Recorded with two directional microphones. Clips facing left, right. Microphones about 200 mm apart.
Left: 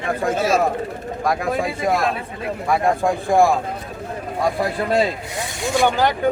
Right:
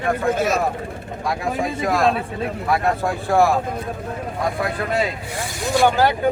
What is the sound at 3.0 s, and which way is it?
Speech, 15° left (ahead or behind).